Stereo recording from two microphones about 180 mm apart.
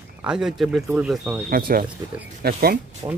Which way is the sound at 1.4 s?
55° right (ahead or behind).